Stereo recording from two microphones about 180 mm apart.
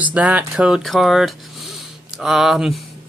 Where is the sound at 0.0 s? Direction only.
5° right (ahead or behind).